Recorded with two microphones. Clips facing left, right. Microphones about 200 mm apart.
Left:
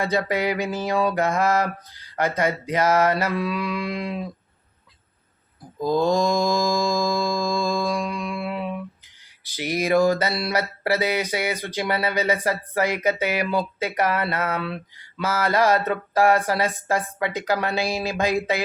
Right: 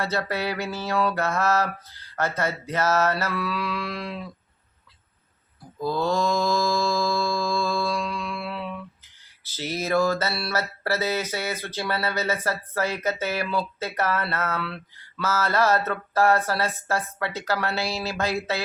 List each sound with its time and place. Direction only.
0.0 s mantra: 15° left (ahead or behind)
5.8 s mantra: 15° left (ahead or behind)